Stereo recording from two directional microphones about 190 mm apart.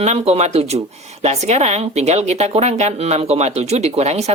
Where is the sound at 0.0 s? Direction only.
35° right (ahead or behind).